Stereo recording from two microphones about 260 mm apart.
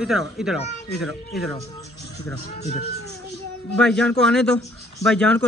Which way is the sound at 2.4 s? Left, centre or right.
Left.